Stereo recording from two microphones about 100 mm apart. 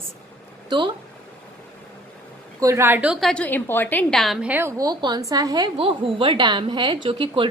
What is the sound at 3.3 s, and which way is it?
Speech, 15° left (ahead or behind).